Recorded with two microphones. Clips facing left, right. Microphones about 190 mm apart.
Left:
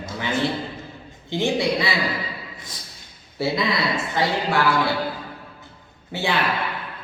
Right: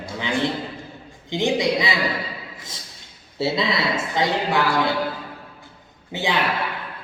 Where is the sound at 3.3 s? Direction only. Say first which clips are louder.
Even; 25° right (ahead or behind).